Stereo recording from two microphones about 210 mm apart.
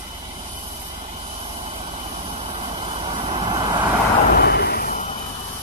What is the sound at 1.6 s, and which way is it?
Vehicle, 30° right (ahead or behind).